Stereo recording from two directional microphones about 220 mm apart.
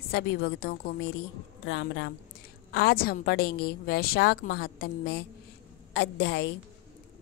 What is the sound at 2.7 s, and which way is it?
A woman's voice, 45° left (ahead or behind).